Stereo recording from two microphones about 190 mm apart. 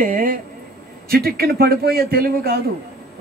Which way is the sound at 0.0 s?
45° right (ahead or behind).